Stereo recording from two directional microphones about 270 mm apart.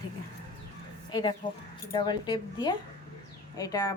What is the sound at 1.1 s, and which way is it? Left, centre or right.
A woman's voice, centre.